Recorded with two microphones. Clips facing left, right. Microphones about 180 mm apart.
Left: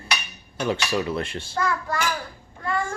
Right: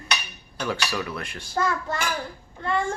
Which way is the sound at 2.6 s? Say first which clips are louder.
Right 1 dB; 25° right (ahead or behind).